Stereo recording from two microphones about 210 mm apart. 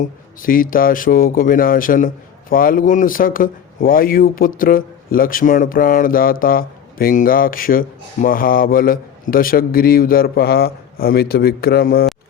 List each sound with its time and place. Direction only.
0.0 s a man's voice: 40° left (ahead or behind)